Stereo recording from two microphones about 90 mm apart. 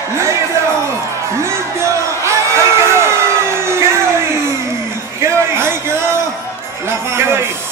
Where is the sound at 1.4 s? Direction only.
30° right (ahead or behind).